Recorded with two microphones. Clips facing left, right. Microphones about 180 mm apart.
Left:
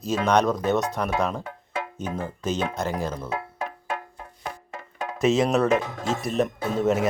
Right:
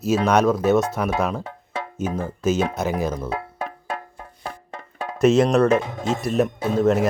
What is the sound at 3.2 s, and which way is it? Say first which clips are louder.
Music: right 2 dB; 35° right (ahead or behind).